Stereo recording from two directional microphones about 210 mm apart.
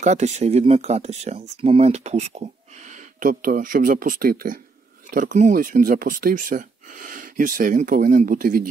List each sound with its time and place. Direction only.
0.0 s speech: 35° right (ahead or behind)